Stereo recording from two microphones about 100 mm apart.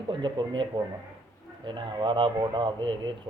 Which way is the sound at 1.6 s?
50° right (ahead or behind).